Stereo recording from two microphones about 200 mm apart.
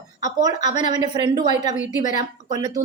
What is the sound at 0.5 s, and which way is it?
Speech, 35° left (ahead or behind).